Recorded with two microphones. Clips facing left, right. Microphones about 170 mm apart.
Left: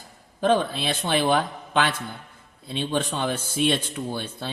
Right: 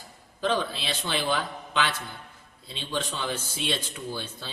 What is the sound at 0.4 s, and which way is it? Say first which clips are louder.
A man's voice: left 6 dB; 50° left (ahead or behind).